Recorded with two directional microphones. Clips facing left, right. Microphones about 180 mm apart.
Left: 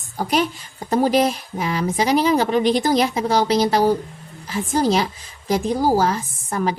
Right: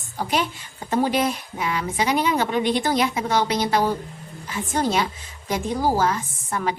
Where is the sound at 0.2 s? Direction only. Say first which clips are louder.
Left 4 dB; 45° left (ahead or behind).